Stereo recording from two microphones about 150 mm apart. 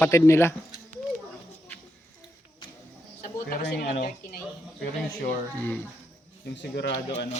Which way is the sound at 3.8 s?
60° left (ahead or behind).